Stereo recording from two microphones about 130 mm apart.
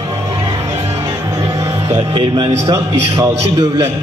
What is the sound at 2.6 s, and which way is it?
A man's voice, 25° right (ahead or behind).